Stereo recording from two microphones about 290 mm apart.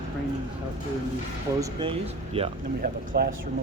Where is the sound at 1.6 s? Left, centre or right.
Centre.